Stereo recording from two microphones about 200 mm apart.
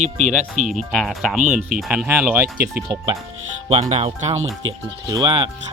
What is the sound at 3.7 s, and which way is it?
Speech, 30° right (ahead or behind).